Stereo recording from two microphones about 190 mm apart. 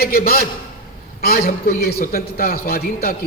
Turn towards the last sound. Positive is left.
turn(degrees=50)  # may be behind; listen again after turning